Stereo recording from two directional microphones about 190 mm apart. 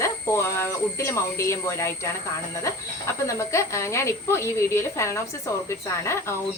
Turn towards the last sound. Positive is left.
turn(degrees=15)  # may be behind; listen again after turning